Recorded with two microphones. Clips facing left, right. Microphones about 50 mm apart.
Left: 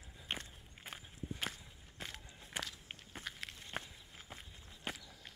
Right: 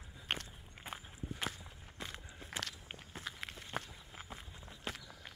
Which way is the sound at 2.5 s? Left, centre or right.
Right.